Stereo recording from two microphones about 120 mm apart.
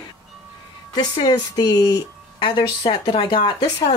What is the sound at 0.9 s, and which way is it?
Speech, 35° left (ahead or behind).